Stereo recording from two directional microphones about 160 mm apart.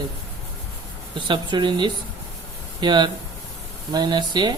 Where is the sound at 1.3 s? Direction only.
30° right (ahead or behind).